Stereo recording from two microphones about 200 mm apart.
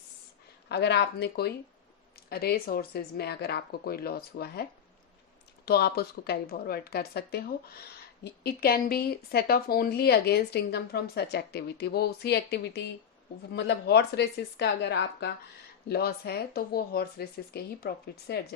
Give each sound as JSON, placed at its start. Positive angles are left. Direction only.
{"t": 0.7, "sound": "speech", "side_deg": 55}
{"t": 5.6, "sound": "speech", "side_deg": 50}